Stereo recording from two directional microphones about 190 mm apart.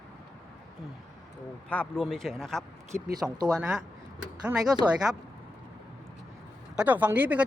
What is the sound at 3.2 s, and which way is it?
Speech, 20° right (ahead or behind).